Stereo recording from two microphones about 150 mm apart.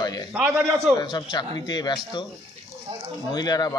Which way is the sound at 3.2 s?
25° left (ahead or behind).